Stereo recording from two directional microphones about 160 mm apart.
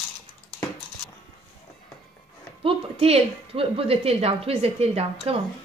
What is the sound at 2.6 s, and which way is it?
A woman's voice, 40° right (ahead or behind).